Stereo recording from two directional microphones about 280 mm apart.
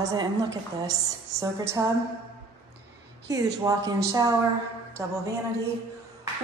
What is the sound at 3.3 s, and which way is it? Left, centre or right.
A woman's voice, centre.